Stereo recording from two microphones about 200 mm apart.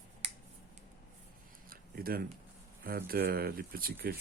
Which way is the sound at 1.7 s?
50° right (ahead or behind).